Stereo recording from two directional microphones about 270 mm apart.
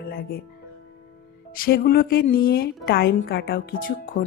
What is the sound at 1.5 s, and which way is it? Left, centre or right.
Music, left.